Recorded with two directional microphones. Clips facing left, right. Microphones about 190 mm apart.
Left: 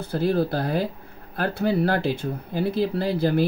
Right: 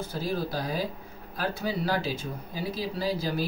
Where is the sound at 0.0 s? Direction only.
65° left (ahead or behind).